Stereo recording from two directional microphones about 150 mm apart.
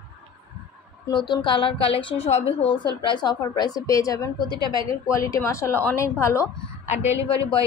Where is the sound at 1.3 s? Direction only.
35° left (ahead or behind).